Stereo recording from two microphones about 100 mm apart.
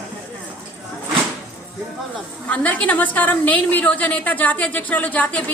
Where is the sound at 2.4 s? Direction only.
15° left (ahead or behind).